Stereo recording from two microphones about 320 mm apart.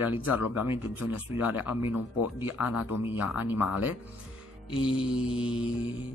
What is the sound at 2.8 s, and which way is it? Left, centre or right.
Speech, left.